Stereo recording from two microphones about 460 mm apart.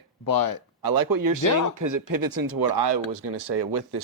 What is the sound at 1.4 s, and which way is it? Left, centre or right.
Speech, left.